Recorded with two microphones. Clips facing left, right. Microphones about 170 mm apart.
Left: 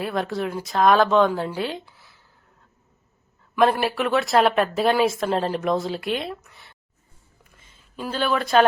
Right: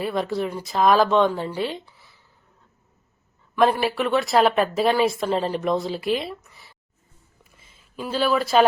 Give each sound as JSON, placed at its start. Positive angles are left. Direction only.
{"t": 0.0, "sound": "speech", "side_deg": 0}
{"t": 3.5, "sound": "speech", "side_deg": 0}
{"t": 7.5, "sound": "a sound", "side_deg": 0}